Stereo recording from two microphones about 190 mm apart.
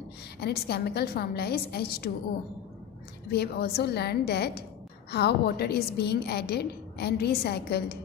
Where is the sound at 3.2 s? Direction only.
60° left (ahead or behind).